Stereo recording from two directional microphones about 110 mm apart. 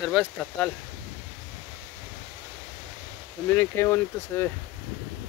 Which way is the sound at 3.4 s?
20° left (ahead or behind).